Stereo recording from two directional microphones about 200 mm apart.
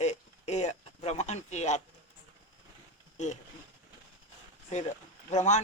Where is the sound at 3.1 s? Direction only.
35° left (ahead or behind).